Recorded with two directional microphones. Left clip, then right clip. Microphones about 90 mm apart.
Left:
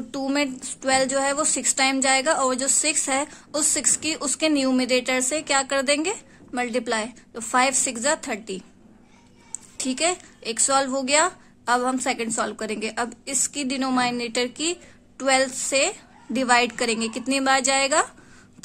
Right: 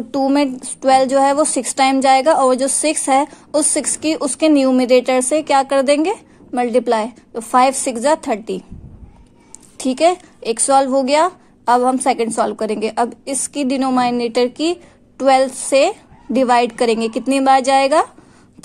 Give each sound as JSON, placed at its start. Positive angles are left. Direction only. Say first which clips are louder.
{"t": 0.1, "sound": "a woman's voice", "louder": "right 9 dB", "side_deg": -35}
{"t": 9.8, "sound": "a woman's voice", "louder": "right 10 dB", "side_deg": -40}